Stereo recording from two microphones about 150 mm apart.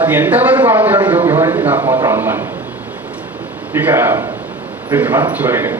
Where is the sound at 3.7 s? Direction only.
15° right (ahead or behind).